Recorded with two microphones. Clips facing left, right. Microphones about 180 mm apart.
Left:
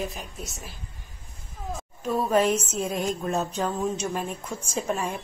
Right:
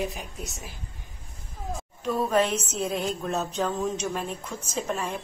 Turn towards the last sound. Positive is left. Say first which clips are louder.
# left 2 dB
turn(degrees=10)  # may be behind; listen again after turning